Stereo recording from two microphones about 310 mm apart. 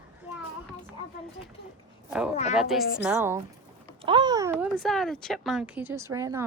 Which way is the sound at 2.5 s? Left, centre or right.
Centre.